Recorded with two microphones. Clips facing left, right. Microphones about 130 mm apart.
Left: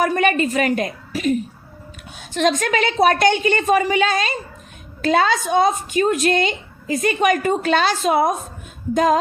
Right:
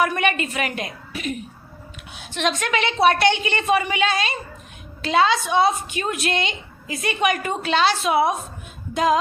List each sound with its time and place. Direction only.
0.0 s a woman's voice: 40° left (ahead or behind)